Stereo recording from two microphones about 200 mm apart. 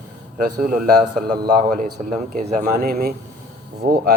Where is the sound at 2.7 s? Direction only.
50° right (ahead or behind).